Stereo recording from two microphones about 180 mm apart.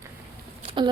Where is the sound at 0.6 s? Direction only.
25° right (ahead or behind).